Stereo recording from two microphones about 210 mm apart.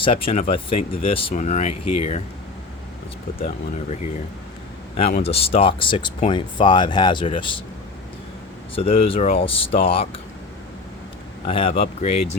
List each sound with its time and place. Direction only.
0.0 s speech: 25° left (ahead or behind)
4.9 s speech: 30° left (ahead or behind)
8.7 s speech: 25° left (ahead or behind)
11.4 s speech: 25° left (ahead or behind)